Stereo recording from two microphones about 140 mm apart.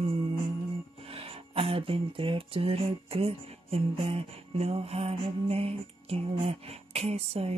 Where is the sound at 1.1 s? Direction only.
45° right (ahead or behind).